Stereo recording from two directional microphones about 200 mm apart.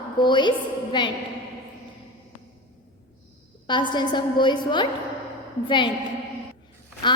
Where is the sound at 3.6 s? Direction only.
25° left (ahead or behind).